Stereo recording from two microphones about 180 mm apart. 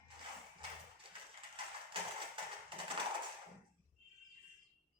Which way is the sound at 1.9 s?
30° right (ahead or behind).